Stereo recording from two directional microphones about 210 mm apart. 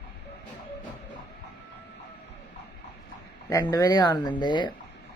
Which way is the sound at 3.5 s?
20° left (ahead or behind).